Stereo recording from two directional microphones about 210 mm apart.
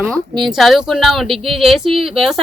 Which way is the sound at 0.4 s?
Centre (ahead or behind).